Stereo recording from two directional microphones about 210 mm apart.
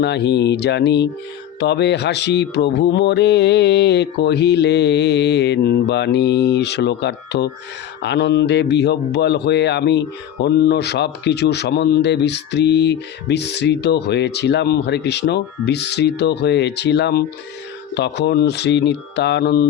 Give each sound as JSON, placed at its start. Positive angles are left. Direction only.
{"t": 0.0, "sound": "a man's voice", "side_deg": 55}